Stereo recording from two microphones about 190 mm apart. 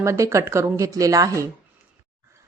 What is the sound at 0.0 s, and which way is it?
A woman's voice, 15° right (ahead or behind).